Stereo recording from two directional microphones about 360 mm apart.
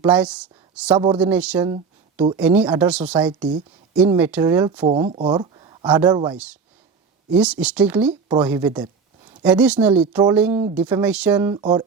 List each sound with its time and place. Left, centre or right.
0.0 s speech: centre
2.4 s speech: centre
10.5 s speech: centre
10.8 s speech: centre